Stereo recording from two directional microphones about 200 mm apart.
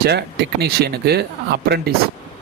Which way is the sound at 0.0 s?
55° right (ahead or behind).